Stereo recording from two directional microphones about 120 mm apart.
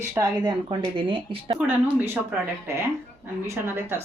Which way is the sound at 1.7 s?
15° right (ahead or behind).